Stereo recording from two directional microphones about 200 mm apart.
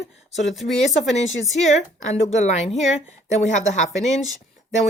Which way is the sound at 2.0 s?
35° left (ahead or behind).